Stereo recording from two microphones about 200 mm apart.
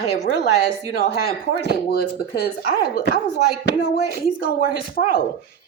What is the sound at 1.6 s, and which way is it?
A woman's voice, 50° left (ahead or behind).